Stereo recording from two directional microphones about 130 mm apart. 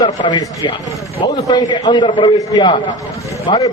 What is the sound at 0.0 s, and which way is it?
A man's voice, 35° left (ahead or behind).